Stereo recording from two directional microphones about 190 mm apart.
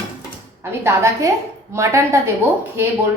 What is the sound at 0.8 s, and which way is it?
A woman's voice, 15° right (ahead or behind).